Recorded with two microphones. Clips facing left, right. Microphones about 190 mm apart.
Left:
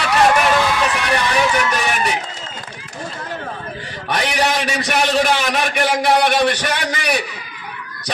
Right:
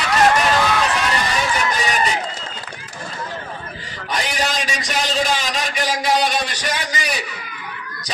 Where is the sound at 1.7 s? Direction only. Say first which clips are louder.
Left 1 dB; 65° left (ahead or behind).